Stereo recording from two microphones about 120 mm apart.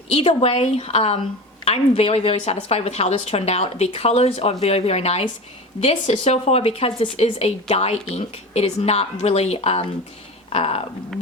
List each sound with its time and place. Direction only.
0.1 s a woman's voice: 55° left (ahead or behind)